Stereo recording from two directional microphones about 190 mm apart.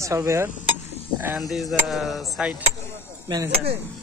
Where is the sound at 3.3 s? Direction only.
20° right (ahead or behind).